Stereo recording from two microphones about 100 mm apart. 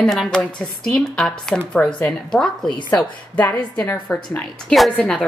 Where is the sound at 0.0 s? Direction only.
5° left (ahead or behind).